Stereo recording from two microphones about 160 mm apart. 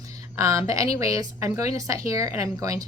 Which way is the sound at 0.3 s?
20° right (ahead or behind).